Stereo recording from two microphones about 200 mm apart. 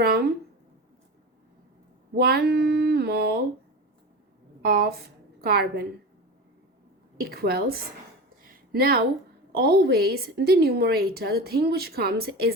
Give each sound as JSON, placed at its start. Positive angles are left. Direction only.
{"t": 0.0, "sound": "a woman's voice", "side_deg": -50}
{"t": 2.1, "sound": "a woman's voice", "side_deg": -50}
{"t": 4.6, "sound": "a woman's voice", "side_deg": -50}
{"t": 7.2, "sound": "a woman's voice", "side_deg": -50}